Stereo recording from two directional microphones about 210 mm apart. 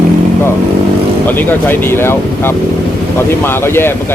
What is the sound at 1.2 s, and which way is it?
Speech, 10° left (ahead or behind).